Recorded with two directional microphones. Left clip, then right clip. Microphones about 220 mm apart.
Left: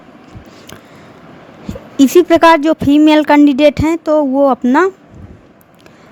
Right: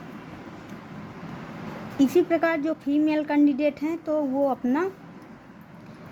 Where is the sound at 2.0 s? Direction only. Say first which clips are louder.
Left 14 dB; 45° left (ahead or behind).